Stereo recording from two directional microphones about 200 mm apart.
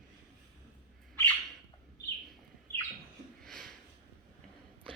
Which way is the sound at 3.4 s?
5° left (ahead or behind).